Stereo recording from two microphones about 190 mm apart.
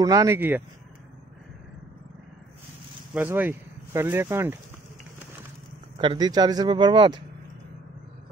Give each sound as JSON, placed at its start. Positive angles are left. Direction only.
{"t": 0.0, "sound": "speech", "side_deg": -20}
{"t": 3.1, "sound": "speech", "side_deg": -10}
{"t": 5.9, "sound": "speech", "side_deg": -25}